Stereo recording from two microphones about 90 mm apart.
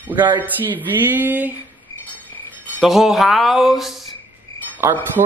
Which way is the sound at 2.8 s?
Centre (ahead or behind).